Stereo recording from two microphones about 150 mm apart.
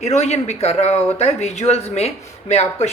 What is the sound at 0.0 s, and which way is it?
Speech, 50° left (ahead or behind).